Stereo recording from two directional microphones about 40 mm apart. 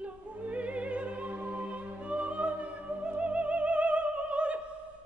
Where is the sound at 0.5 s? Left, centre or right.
Right.